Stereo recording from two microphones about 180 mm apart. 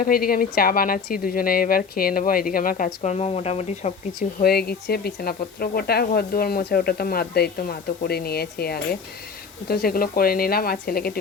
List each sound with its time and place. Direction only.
0.0 s a woman's voice: 55° left (ahead or behind); by 3.9 s 35° left (ahead or behind)
4.4 s speech: 60° left (ahead or behind)